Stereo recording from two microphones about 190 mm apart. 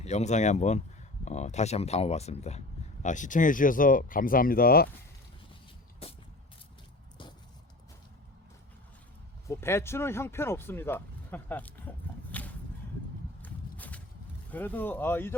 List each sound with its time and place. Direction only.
0.0 s speech: 35° left (ahead or behind); by 4.9 s 50° left (ahead or behind)
9.5 s speech: 15° left (ahead or behind)
13.4 s walk: 10° left (ahead or behind)
14.5 s speech: 10° left (ahead or behind)